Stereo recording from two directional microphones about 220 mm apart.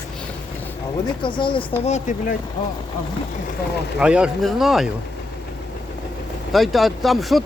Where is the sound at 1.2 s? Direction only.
20° left (ahead or behind).